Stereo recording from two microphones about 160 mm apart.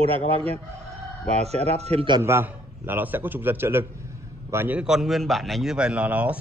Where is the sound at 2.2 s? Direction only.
15° right (ahead or behind).